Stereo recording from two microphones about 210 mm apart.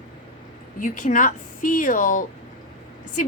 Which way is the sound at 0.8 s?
40° left (ahead or behind).